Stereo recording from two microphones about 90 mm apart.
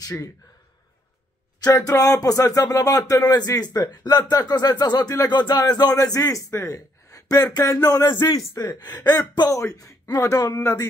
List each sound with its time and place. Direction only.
1.9 s speech: 40° left (ahead or behind)
9.5 s a man's voice: 40° left (ahead or behind)